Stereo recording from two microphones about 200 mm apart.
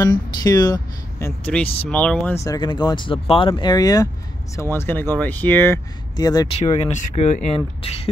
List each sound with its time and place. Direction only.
0.0 s speech: 20° left (ahead or behind)
1.2 s speech: 10° left (ahead or behind)
6.7 s speech: 35° left (ahead or behind)